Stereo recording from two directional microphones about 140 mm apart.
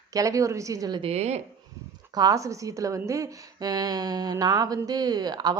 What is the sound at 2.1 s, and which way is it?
A woman's voice, 25° right (ahead or behind).